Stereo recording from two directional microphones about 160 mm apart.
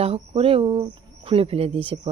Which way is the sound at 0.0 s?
35° right (ahead or behind).